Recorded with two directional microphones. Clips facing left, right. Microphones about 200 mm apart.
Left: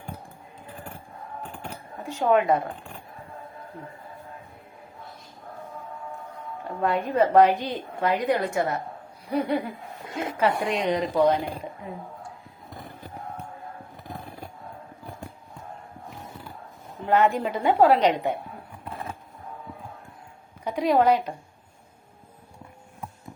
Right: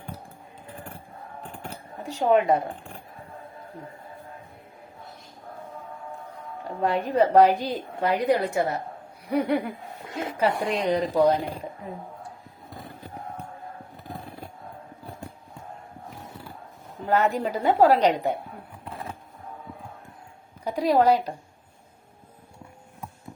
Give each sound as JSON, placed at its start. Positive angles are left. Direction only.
{"t": 2.0, "sound": "a woman's voice", "side_deg": -35}
{"t": 6.7, "sound": "a woman's voice", "side_deg": -35}
{"t": 9.2, "sound": "speech", "side_deg": -60}
{"t": 10.4, "sound": "a woman's voice", "side_deg": -35}
{"t": 17.1, "sound": "a woman's voice", "side_deg": -40}
{"t": 20.7, "sound": "a woman's voice", "side_deg": -35}